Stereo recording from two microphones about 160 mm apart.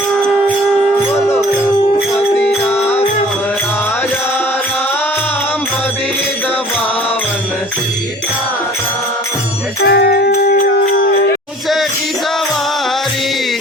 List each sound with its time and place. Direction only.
2.1 s music: 5° left (ahead or behind)
2.8 s music: 40° left (ahead or behind)
9.9 s music: 90° left